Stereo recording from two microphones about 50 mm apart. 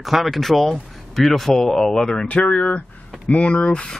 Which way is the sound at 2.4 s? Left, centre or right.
Left.